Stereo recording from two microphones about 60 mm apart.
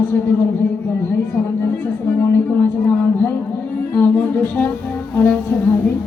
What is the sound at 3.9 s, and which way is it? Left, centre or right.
Speech, left.